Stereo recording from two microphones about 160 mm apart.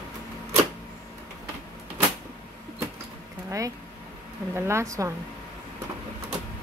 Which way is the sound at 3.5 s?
20° right (ahead or behind).